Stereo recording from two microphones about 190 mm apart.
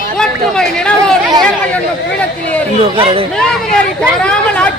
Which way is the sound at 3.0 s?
30° right (ahead or behind).